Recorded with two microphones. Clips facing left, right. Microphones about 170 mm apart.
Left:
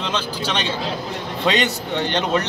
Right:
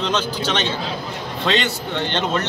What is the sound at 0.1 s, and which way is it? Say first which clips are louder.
A man's voice: right 2 dB; 10° left (ahead or behind).